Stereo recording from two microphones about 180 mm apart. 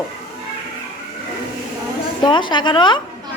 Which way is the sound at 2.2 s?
25° left (ahead or behind).